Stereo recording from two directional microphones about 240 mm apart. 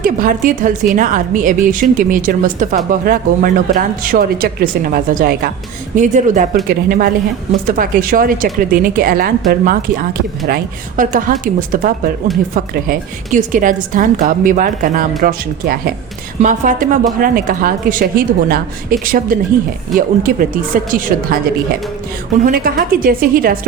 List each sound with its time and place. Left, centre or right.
0.0 s speech: right